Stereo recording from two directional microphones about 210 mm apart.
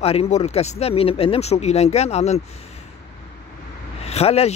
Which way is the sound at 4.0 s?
30° left (ahead or behind).